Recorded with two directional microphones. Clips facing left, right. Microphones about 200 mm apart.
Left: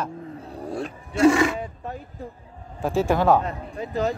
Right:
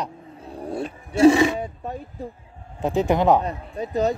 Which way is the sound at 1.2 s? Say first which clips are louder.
Right 3 dB; 20° right (ahead or behind).